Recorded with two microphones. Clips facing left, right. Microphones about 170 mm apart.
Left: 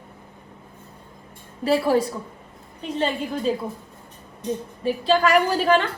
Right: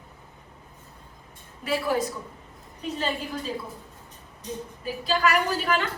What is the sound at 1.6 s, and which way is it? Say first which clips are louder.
Speech: left 7 dB; 35° left (ahead or behind).